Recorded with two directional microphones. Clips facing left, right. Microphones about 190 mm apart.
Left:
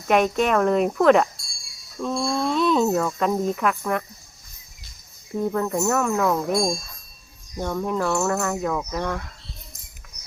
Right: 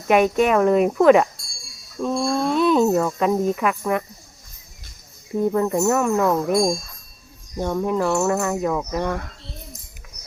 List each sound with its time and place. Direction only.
0.1 s speech: 5° right (ahead or behind)
5.4 s speech: 10° right (ahead or behind)
7.6 s speech: 10° right (ahead or behind)